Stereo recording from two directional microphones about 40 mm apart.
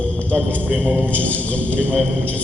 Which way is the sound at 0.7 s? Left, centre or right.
Right.